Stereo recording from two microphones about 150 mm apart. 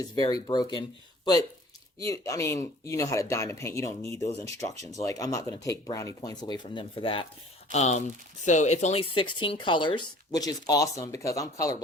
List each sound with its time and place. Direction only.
0.0 s speech: 25° left (ahead or behind)
7.7 s speech: 50° left (ahead or behind); by 11.7 s 20° left (ahead or behind)